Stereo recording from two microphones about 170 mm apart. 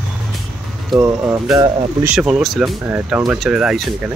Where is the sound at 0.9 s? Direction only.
15° right (ahead or behind).